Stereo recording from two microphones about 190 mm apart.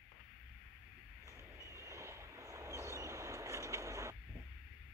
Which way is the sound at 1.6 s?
15° right (ahead or behind).